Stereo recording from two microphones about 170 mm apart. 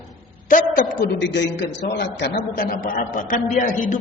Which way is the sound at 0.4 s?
50° left (ahead or behind).